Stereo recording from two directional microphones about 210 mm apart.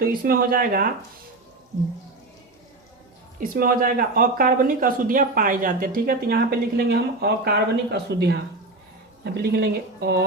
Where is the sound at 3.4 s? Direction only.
40° right (ahead or behind).